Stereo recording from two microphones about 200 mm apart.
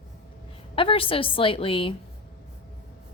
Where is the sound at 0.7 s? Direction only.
25° left (ahead or behind).